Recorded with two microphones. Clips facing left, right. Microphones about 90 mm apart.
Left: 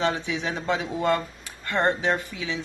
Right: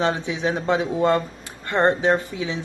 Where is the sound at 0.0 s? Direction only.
20° right (ahead or behind).